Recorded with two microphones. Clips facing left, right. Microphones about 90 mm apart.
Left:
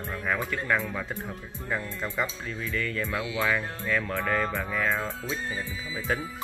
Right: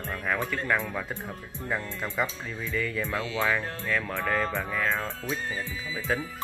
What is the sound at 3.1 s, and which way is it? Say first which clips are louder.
Speech: even; 15° left (ahead or behind).